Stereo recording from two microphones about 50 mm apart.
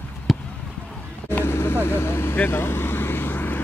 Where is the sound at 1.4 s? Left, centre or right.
Left.